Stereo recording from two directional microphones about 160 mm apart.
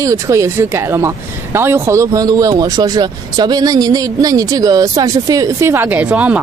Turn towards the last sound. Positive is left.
turn(degrees=-10)  # may be behind; listen again after turning